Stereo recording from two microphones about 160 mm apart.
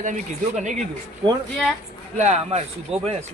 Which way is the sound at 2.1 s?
45° right (ahead or behind).